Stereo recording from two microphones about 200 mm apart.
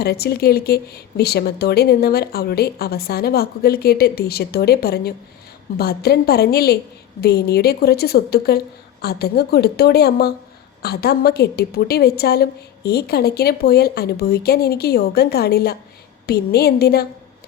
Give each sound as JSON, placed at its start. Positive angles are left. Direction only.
{"t": 0.0, "sound": "speech", "side_deg": 50}